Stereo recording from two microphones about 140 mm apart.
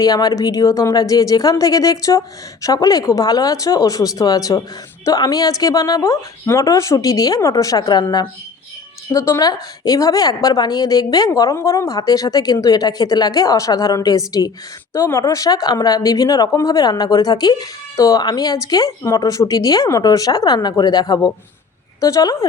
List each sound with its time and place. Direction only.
0.0 s speech: 25° left (ahead or behind)